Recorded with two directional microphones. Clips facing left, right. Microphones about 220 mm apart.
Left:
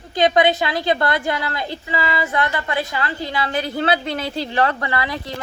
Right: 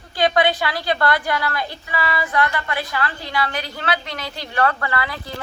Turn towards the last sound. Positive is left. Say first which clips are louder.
# left 2 dB
turn(degrees=20)  # may be behind; listen again after turning